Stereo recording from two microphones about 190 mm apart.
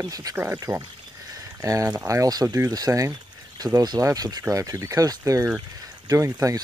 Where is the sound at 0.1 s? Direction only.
20° right (ahead or behind).